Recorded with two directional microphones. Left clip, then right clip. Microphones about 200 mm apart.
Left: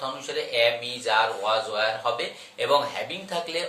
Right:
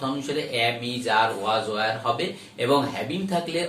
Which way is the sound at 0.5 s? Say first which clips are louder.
Left 4 dB; 15° left (ahead or behind).